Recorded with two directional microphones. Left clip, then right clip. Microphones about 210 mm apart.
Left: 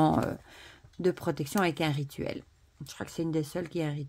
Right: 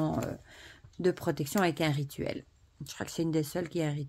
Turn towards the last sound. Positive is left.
turn(degrees=0)  # may be behind; listen again after turning